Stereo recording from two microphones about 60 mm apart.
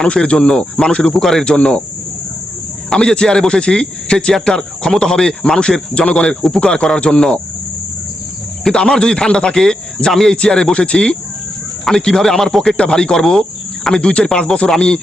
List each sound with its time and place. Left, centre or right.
0.0 s speech: centre
1.5 s speech: left
2.9 s speech: centre
8.6 s speech: centre